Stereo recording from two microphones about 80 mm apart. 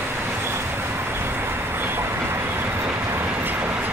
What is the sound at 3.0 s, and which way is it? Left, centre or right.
Train, right.